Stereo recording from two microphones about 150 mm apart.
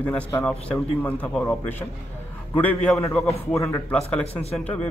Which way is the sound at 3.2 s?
20° left (ahead or behind).